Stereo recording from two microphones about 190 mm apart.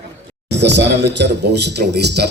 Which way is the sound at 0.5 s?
65° right (ahead or behind).